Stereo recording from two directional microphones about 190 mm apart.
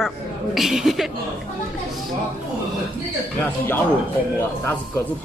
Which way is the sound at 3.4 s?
10° left (ahead or behind).